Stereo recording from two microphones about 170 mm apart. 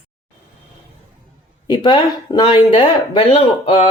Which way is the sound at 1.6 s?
30° left (ahead or behind).